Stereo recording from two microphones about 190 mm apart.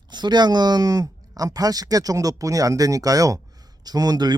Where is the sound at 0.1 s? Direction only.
25° right (ahead or behind).